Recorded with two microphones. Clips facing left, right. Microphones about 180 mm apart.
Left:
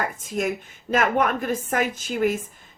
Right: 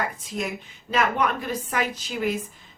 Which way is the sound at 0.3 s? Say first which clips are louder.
Left 6 dB; 50° left (ahead or behind).